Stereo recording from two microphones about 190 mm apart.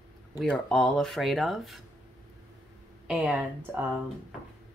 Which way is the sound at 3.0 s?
5° right (ahead or behind).